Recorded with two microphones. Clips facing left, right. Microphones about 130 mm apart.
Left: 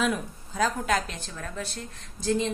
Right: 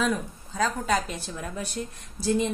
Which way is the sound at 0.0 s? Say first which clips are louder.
Right 1 dB; 5° left (ahead or behind).